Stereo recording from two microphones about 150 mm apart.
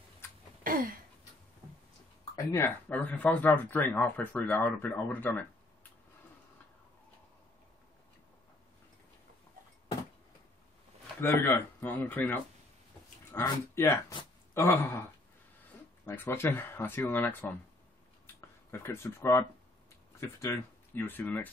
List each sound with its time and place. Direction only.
0.7 s a sound: 70° right (ahead or behind)
2.3 s speech: 20° left (ahead or behind)
11.1 s speech: 15° left (ahead or behind)
16.1 s speech: 15° left (ahead or behind)
20.9 s speech: 15° left (ahead or behind)